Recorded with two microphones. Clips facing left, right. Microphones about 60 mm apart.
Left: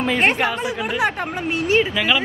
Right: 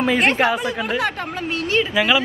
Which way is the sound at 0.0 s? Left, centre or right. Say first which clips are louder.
Right 1 dB; centre.